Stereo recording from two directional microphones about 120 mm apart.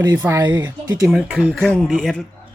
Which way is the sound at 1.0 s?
5° right (ahead or behind).